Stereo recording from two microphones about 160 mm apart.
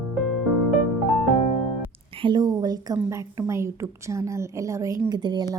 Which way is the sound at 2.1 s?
30° right (ahead or behind).